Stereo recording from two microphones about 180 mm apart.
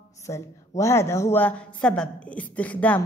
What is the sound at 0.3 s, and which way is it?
A woman's voice, 15° left (ahead or behind).